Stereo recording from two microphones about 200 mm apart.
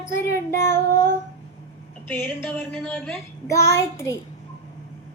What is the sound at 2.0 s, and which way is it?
A child's voice, 10° left (ahead or behind).